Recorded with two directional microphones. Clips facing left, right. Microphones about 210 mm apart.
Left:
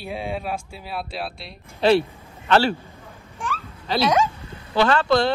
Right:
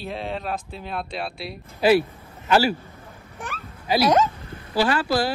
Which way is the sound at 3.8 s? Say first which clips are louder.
Right 2 dB; 10° right (ahead or behind).